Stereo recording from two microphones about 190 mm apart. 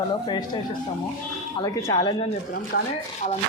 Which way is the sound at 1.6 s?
20° left (ahead or behind).